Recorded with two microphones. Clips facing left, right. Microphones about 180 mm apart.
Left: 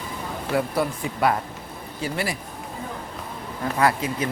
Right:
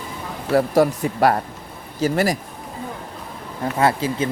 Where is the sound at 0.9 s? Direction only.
40° right (ahead or behind).